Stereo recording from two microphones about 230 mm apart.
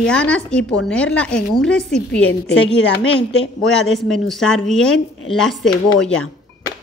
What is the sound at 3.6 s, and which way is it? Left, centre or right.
Speech, centre.